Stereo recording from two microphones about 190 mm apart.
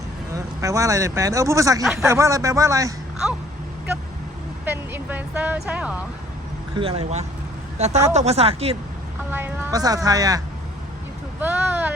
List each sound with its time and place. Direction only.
0.3 s speech: 15° right (ahead or behind)
1.8 s speech: centre (ahead or behind)
2.0 s speech: 15° right (ahead or behind)
4.6 s speech: 10° right (ahead or behind)
6.7 s speech: 30° right (ahead or behind)
9.3 s speech: 10° right (ahead or behind)